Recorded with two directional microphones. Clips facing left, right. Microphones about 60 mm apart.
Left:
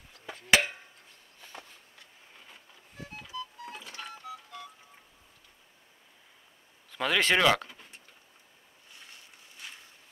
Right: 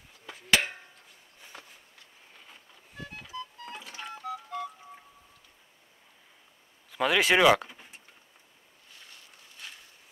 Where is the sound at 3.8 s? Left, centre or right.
Centre.